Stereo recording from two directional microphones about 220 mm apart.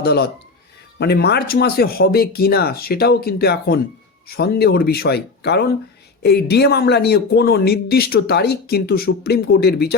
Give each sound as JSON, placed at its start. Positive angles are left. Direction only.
{"t": 0.0, "sound": "speech", "side_deg": 45}